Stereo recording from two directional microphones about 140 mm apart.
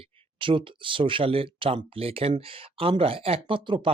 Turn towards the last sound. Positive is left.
turn(degrees=-40)  # may be behind; listen again after turning